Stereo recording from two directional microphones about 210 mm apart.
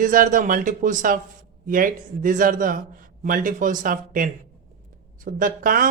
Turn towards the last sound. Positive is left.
turn(degrees=-40)  # may be behind; listen again after turning